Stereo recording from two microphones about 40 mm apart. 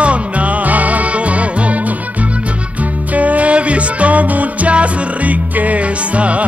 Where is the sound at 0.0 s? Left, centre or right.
Right.